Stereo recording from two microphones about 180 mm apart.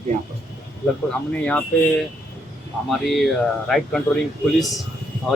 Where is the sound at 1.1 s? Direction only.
5° left (ahead or behind).